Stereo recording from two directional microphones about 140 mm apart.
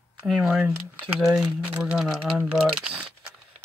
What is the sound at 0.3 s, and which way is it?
Speech, centre (ahead or behind).